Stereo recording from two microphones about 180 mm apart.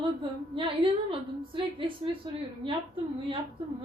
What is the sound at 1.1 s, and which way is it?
Speech, 30° right (ahead or behind).